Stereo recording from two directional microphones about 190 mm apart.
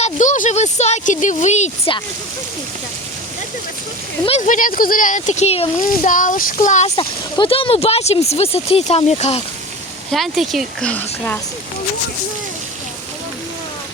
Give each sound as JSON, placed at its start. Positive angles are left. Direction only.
{"t": 0.0, "sound": "speech", "side_deg": 40}
{"t": 4.3, "sound": "a child's voice", "side_deg": 40}
{"t": 6.9, "sound": "speech", "side_deg": 25}
{"t": 10.1, "sound": "speech", "side_deg": 0}